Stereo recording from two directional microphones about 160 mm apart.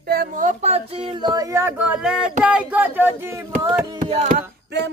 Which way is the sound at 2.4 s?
10° right (ahead or behind).